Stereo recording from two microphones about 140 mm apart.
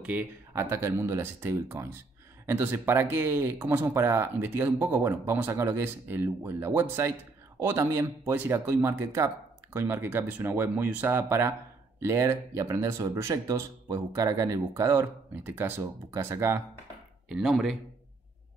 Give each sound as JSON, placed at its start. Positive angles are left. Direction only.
{"t": 0.5, "sound": "speech", "side_deg": -20}
{"t": 17.3, "sound": "speech", "side_deg": -5}